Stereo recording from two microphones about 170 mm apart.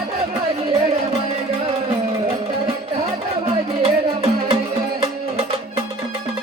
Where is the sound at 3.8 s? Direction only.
35° right (ahead or behind).